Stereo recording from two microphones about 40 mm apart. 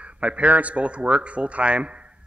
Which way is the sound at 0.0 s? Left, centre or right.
Right.